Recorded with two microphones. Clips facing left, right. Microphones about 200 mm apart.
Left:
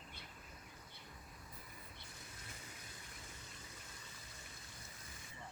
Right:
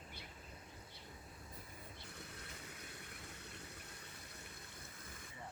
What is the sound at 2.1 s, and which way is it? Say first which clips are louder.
Water: right 3 dB; 60° right (ahead or behind).